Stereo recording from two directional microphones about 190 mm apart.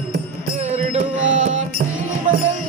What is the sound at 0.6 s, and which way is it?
Music, 40° right (ahead or behind).